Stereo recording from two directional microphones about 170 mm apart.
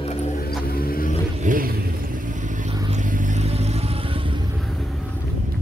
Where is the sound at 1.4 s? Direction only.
55° right (ahead or behind); by 4.4 s 35° right (ahead or behind).